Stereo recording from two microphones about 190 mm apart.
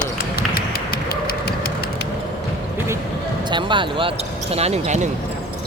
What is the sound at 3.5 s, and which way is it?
Speech, 25° right (ahead or behind).